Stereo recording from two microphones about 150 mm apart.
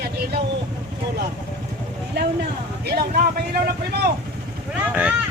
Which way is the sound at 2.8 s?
80° right.